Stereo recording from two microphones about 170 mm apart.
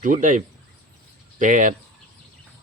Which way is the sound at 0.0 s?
50° right (ahead or behind).